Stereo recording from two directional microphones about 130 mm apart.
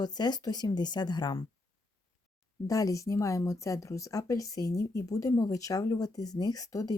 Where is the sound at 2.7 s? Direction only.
25° left (ahead or behind).